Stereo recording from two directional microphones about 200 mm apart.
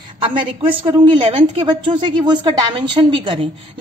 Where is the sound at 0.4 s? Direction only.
25° right (ahead or behind).